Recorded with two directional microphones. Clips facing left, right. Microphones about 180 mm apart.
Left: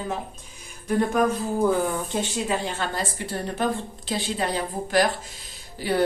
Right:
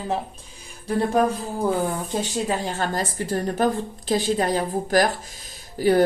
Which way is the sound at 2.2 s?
40° right (ahead or behind).